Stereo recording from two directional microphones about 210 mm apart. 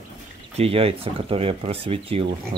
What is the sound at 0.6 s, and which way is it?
Speech, 25° right (ahead or behind).